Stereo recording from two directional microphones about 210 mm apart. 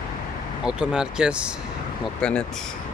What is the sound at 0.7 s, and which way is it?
Speech, 5° right (ahead or behind).